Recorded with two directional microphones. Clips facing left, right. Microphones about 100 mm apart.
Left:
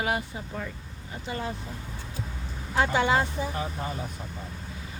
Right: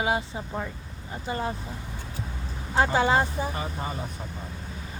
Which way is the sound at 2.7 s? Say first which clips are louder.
Right 2 dB; 35° right (ahead or behind).